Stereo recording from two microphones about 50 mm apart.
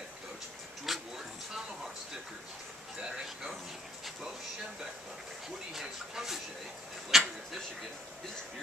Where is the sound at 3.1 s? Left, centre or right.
Centre.